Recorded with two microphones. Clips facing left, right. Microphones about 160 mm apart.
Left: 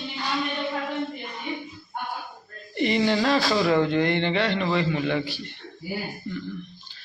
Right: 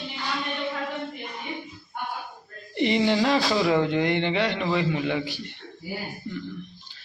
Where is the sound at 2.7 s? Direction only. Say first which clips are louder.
Even; 20° right (ahead or behind).